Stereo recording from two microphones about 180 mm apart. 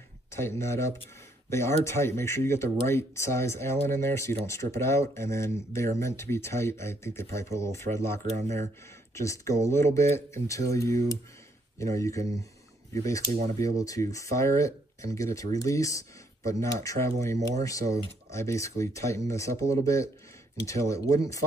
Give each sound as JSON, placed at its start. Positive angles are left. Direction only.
{"t": 0.3, "sound": "speech", "side_deg": 15}